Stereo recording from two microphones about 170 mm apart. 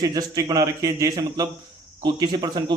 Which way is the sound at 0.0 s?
20° right (ahead or behind).